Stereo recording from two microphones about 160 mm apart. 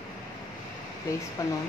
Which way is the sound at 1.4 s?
20° left (ahead or behind).